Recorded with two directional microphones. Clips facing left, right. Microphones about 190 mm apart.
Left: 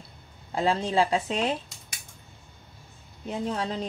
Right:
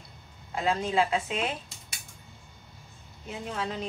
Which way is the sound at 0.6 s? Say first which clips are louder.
Left 2 dB; 30° left (ahead or behind).